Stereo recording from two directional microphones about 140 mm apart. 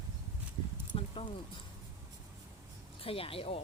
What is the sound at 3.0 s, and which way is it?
Speech, 40° left (ahead or behind).